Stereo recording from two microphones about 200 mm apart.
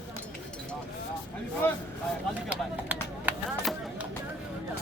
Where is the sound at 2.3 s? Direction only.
5° right (ahead or behind).